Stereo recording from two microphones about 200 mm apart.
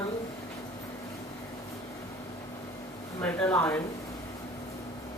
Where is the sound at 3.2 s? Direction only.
10° left (ahead or behind).